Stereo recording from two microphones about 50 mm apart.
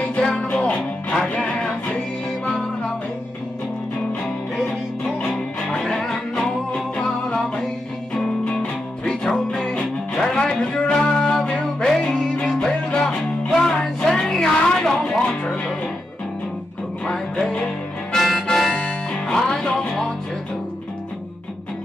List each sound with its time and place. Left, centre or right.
0.0 s music: left
5.3 s music: centre
15.0 s music: left
17.0 s music: centre
18.1 s harmonica: centre
18.8 s music: centre